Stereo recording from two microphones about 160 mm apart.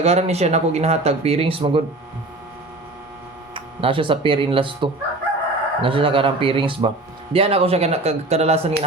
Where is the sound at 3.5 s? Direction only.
30° right (ahead or behind).